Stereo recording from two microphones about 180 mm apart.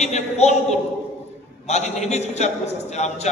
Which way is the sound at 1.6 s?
40° left (ahead or behind).